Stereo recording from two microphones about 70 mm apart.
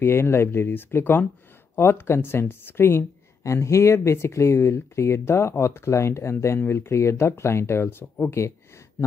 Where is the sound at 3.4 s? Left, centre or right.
Left.